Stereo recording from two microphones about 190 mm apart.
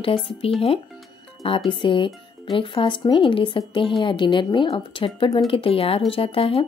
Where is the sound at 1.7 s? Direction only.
25° left (ahead or behind).